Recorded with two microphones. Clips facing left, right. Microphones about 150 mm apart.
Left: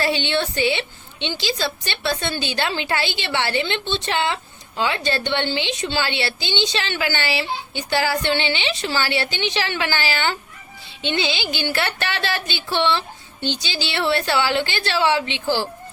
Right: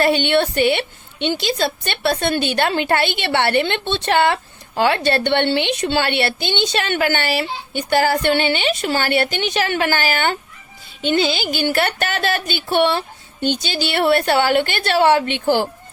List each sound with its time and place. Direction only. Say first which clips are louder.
0.0 s a woman's voice: right 6 dB; 55° right (ahead or behind)